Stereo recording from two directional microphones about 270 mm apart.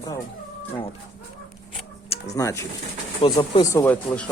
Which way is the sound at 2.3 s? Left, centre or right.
Centre.